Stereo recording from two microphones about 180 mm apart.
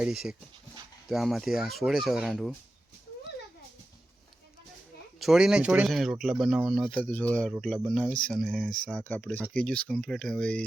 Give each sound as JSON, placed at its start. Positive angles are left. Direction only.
{"t": 0.0, "sound": "speech", "side_deg": 0}
{"t": 5.2, "sound": "speech", "side_deg": -5}